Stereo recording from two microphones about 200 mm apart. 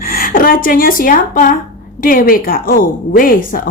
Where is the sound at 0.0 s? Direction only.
45° left (ahead or behind).